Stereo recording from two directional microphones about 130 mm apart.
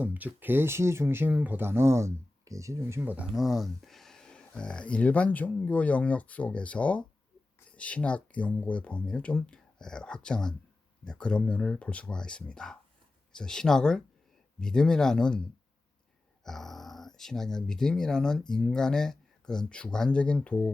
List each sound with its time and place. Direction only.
0.0 s speech: 10° right (ahead or behind)
3.3 s speech: centre (ahead or behind)